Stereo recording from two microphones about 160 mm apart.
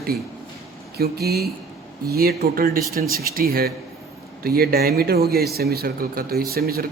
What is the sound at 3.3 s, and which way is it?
Speech, 70° right (ahead or behind).